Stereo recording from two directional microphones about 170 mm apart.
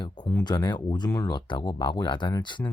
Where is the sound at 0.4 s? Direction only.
25° left (ahead or behind).